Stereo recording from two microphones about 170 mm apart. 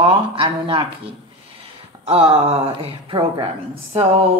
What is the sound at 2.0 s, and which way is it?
A woman's voice, 35° right (ahead or behind).